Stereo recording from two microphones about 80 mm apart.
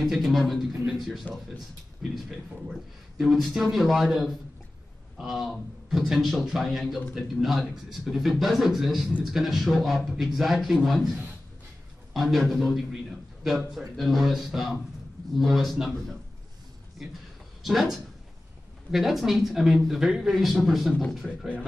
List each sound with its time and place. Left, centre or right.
0.0 s speech: centre
1.3 s speech: centre
2.1 s speech: centre
17.6 s speech: centre